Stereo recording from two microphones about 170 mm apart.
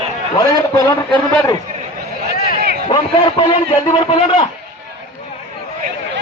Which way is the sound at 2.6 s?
65° right (ahead or behind).